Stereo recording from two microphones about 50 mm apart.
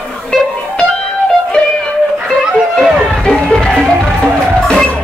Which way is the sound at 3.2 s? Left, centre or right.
Centre.